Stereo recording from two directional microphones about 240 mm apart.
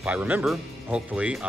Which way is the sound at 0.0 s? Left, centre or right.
Centre.